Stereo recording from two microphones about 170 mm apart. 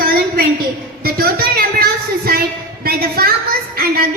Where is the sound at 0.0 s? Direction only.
60° right (ahead or behind).